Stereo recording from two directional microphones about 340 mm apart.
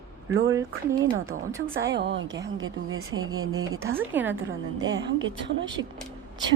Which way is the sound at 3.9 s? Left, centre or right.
Centre.